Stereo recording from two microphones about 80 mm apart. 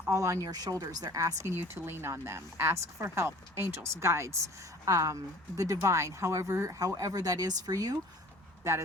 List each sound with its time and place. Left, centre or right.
0.1 s speech: right
1.8 s a woman's voice: right
8.7 s a woman's voice: right